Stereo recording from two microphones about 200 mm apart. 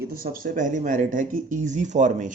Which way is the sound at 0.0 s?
45° right (ahead or behind).